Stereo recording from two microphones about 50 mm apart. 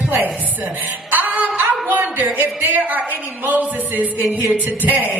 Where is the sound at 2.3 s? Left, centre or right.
Right.